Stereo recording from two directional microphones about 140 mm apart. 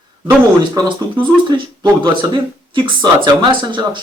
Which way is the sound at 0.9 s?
35° right (ahead or behind).